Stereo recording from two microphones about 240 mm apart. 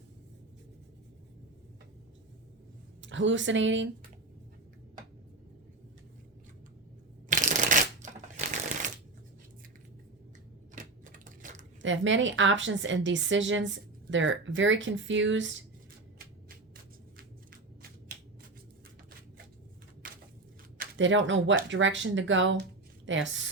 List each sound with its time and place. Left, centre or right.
3.0 s a woman's voice: right
7.3 s crushing: right
10.8 s typewriter: right
11.8 s a woman's voice: right
20.0 s a sound: right
20.7 s a woman's voice: right